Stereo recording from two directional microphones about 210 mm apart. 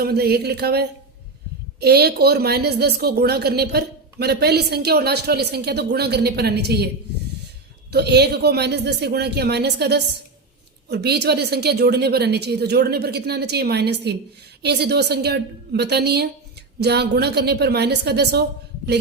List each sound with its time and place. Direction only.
0.0 s a woman's voice: 50° right (ahead or behind)